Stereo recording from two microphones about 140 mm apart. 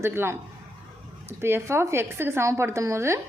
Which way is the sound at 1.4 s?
15° right (ahead or behind).